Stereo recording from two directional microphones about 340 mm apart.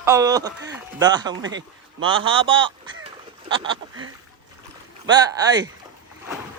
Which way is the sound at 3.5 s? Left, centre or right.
Centre.